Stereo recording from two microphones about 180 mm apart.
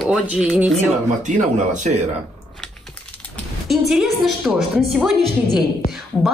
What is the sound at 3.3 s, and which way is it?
Speech, centre (ahead or behind).